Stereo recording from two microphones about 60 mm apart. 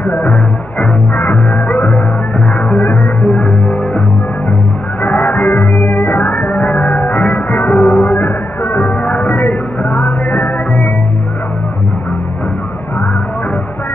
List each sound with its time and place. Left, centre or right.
0.0 s music: left
3.2 s music: centre
5.0 s music: left